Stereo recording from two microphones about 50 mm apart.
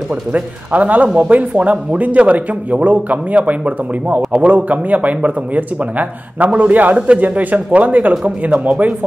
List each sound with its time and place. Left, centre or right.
0.1 s a man's voice: right